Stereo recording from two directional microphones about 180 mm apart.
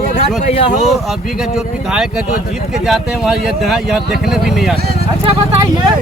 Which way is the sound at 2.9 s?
5° right (ahead or behind).